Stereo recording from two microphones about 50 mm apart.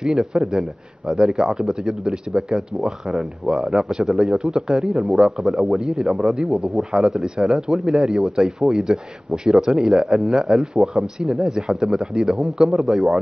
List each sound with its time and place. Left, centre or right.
0.0 s a man's voice: centre